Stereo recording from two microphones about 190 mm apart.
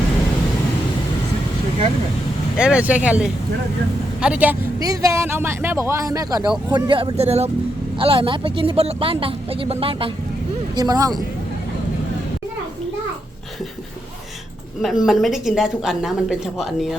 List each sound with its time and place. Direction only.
2.6 s a woman's voice: 5° right (ahead or behind)
4.8 s speech: 20° right (ahead or behind)
14.8 s a woman's voice: centre (ahead or behind)